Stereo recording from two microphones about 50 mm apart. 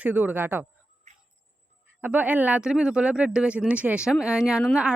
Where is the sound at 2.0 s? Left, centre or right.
Right.